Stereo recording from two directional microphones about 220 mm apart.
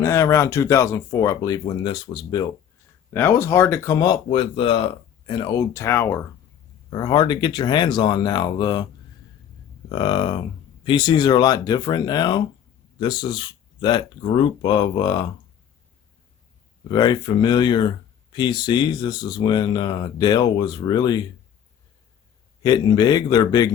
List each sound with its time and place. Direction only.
0.0 s speech: 15° left (ahead or behind)
9.9 s speech: 20° left (ahead or behind)
16.9 s speech: 20° left (ahead or behind)
22.6 s speech: 20° left (ahead or behind)